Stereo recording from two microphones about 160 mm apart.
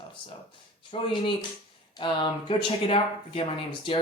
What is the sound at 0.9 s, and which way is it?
Speech, 40° left (ahead or behind).